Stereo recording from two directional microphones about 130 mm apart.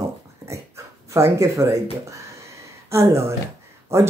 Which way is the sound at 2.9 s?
20° right (ahead or behind).